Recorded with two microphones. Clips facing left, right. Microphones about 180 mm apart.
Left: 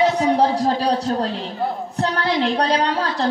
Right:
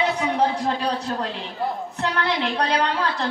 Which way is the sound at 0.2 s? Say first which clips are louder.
Left 5 dB; 35° left (ahead or behind).